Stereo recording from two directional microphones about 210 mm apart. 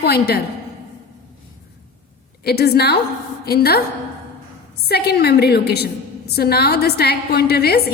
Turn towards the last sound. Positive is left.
turn(degrees=50)  # may be behind; listen again after turning